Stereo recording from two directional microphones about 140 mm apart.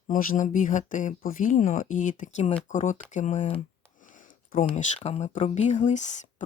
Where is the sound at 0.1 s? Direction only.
75° left (ahead or behind); by 3.4 s 60° left (ahead or behind).